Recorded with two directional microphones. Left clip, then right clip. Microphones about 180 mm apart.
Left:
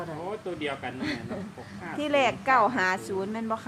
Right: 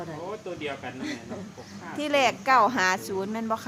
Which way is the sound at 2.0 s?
Centre (ahead or behind).